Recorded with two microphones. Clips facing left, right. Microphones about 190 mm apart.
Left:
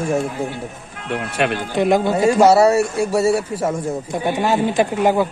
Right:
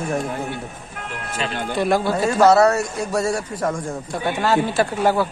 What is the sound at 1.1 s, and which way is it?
Speech, 65° left (ahead or behind).